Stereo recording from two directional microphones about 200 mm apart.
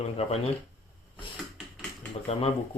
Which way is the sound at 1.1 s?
Centre (ahead or behind).